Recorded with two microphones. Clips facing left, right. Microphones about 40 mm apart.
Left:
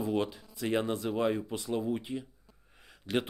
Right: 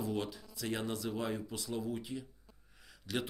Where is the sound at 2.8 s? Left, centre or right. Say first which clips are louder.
Left 6 dB; left.